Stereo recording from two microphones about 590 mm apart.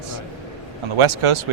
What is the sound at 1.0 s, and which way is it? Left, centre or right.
Speech, right.